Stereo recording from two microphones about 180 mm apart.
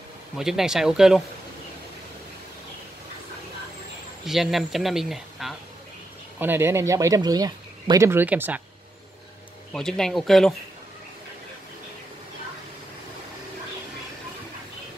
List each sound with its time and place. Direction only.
0.4 s speech: centre (ahead or behind)
4.3 s speech: centre (ahead or behind)
6.4 s speech: 10° right (ahead or behind)
9.7 s speech: 5° left (ahead or behind)